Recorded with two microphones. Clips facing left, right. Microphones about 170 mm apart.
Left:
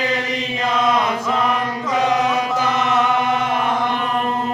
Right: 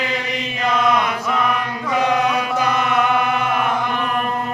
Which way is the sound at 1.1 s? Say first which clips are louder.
Left 1 dB; 25° left (ahead or behind).